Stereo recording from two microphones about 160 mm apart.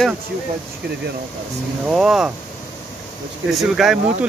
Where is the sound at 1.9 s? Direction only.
5° right (ahead or behind).